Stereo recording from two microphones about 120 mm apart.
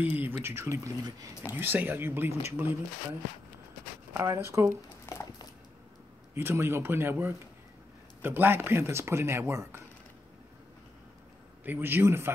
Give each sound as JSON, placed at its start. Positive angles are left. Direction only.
{"t": 0.0, "sound": "a man's voice", "side_deg": -15}
{"t": 4.1, "sound": "speech", "side_deg": -25}
{"t": 5.0, "sound": "a sound", "side_deg": 25}
{"t": 6.3, "sound": "speech", "side_deg": -20}
{"t": 11.6, "sound": "a man's voice", "side_deg": -15}